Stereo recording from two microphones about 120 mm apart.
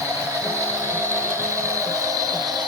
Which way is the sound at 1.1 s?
25° right (ahead or behind).